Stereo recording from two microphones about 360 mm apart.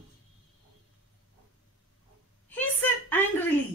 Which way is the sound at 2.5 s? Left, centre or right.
Centre.